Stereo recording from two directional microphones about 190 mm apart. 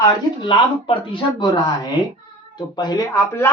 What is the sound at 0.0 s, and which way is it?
Speech, 25° left (ahead or behind).